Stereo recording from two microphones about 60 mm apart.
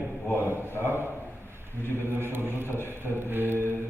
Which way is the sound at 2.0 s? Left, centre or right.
Right.